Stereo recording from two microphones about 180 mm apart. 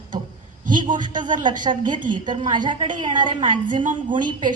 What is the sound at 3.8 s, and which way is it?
Speech, 45° right (ahead or behind).